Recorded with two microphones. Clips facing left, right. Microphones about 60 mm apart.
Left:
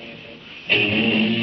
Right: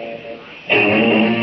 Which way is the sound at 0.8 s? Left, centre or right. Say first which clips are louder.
Right 7 dB; right.